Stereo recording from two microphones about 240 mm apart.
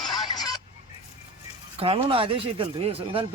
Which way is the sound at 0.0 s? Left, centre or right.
Centre.